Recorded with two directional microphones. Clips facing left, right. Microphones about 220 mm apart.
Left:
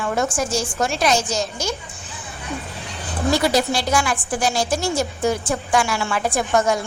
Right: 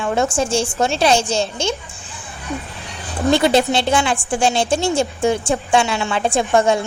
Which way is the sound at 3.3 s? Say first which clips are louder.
Right 4 dB; 25° right (ahead or behind).